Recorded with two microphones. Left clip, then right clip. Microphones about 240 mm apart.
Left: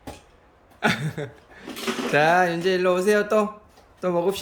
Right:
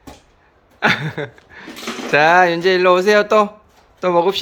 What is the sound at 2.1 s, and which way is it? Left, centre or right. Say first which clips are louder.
Speech: right 7 dB; centre.